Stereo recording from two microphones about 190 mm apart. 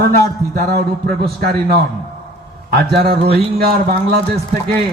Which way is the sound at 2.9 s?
55° right (ahead or behind).